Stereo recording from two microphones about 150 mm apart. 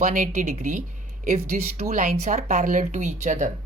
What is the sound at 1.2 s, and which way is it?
Speech, 45° right (ahead or behind).